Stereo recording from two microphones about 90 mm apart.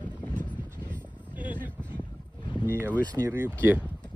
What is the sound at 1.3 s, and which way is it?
Vehicle, 20° right (ahead or behind).